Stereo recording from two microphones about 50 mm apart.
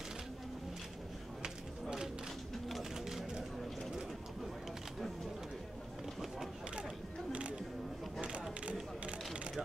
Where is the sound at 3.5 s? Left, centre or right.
Centre.